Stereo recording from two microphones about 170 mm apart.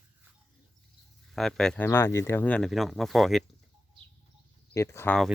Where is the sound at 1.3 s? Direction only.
Centre (ahead or behind).